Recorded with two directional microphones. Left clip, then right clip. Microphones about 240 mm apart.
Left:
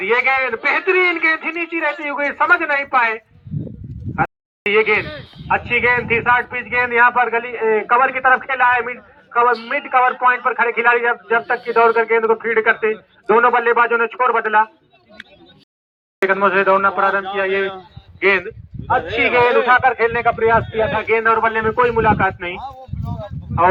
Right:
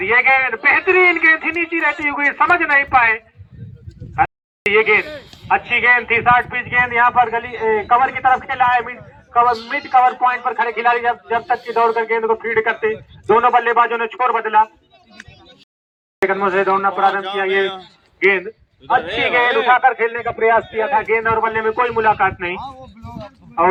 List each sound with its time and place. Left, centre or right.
0.0 s a man's voice: left
4.1 s a sound: centre
5.5 s a man's voice: centre
16.3 s a man's voice: left
19.0 s a man's voice: centre
19.3 s a man's voice: centre
22.5 s a sound: left
23.5 s speech: left